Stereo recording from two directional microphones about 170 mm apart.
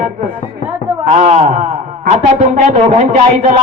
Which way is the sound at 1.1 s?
45° right (ahead or behind).